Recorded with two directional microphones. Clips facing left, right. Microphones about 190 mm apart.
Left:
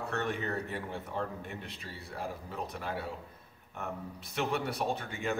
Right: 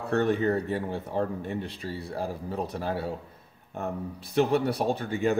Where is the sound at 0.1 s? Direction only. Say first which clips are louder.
Right 12 dB; 35° right (ahead or behind).